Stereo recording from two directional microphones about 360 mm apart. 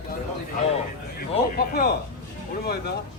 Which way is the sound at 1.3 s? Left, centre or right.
Left.